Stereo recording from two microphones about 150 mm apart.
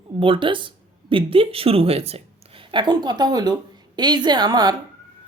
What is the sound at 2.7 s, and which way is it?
Speech, 30° right (ahead or behind).